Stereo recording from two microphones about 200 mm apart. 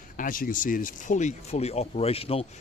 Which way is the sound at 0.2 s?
45° left (ahead or behind).